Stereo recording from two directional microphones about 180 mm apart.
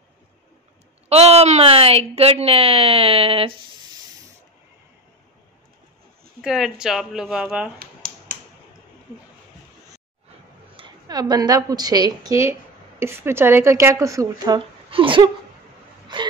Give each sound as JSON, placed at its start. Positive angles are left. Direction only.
{"t": 1.0, "sound": "speech", "side_deg": -35}
{"t": 6.4, "sound": "speech", "side_deg": -5}
{"t": 7.8, "sound": "finger snapping", "side_deg": -55}
{"t": 10.8, "sound": "speech", "side_deg": -20}
{"t": 16.1, "sound": "whimper", "side_deg": -25}